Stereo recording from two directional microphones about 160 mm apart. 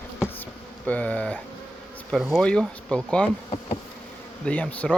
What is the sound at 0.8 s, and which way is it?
Speech, 10° left (ahead or behind).